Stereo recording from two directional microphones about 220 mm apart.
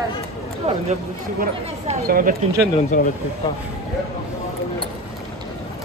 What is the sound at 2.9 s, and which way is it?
Speech, 35° left (ahead or behind).